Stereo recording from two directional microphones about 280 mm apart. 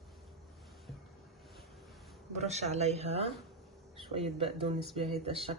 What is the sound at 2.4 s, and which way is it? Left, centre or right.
Speech, right.